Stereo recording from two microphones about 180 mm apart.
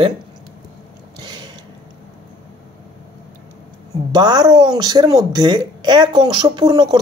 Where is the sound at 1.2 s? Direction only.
25° right (ahead or behind).